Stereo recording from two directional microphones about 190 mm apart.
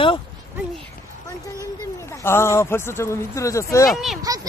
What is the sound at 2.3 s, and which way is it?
Speech, 15° left (ahead or behind).